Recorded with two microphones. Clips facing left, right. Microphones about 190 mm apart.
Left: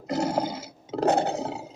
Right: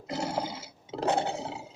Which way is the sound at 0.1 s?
40° left (ahead or behind).